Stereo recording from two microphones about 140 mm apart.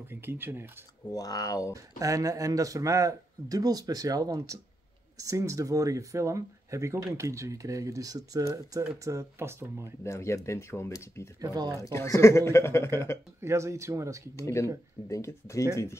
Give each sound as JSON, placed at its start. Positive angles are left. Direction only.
{"t": 0.1, "sound": "speech", "side_deg": -15}
{"t": 1.1, "sound": "speech", "side_deg": 25}
{"t": 1.7, "sound": "speech", "side_deg": -25}
{"t": 10.0, "sound": "speech", "side_deg": 20}
{"t": 11.4, "sound": "speech", "side_deg": -25}
{"t": 11.8, "sound": "speech", "side_deg": 20}
{"t": 13.4, "sound": "speech", "side_deg": -20}
{"t": 14.3, "sound": "speech", "side_deg": 20}